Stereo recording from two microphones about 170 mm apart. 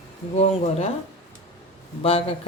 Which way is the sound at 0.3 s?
40° left (ahead or behind).